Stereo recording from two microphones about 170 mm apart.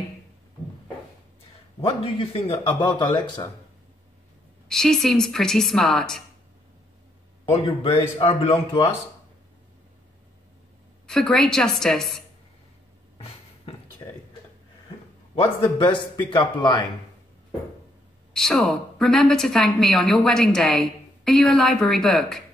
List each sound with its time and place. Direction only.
1.8 s speech: 30° left (ahead or behind)
4.6 s a woman's voice: 5° left (ahead or behind)
7.6 s a man's voice: 30° left (ahead or behind)
11.1 s a woman's voice: 5° left (ahead or behind)
13.2 s a sound: 30° left (ahead or behind)
15.3 s a man's voice: 30° left (ahead or behind)
18.3 s a woman's voice: 5° left (ahead or behind)